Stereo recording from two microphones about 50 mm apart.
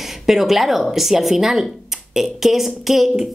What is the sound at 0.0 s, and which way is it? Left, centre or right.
A woman's voice, centre.